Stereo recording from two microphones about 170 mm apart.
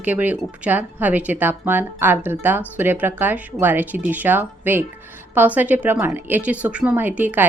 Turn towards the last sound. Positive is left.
turn(degrees=-10)  # may be behind; listen again after turning